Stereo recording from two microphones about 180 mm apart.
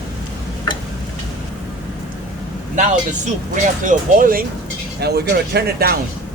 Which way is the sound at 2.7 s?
45° right (ahead or behind).